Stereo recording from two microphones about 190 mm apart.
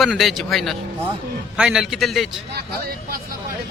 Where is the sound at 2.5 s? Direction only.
55° right (ahead or behind).